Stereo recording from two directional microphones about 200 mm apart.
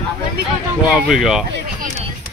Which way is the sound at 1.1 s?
Centre (ahead or behind).